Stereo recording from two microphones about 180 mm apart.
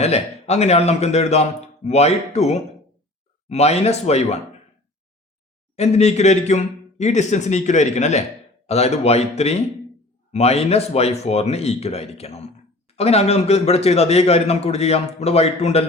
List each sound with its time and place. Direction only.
0.0 s a man's voice: 35° left (ahead or behind)
5.7 s a man's voice: 35° left (ahead or behind)